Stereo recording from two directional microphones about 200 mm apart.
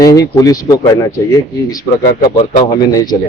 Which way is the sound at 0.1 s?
15° left (ahead or behind).